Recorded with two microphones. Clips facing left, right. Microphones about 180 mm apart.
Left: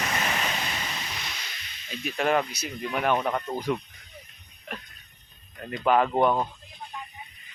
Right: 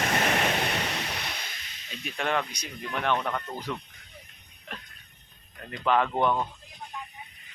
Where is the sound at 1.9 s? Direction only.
5° left (ahead or behind).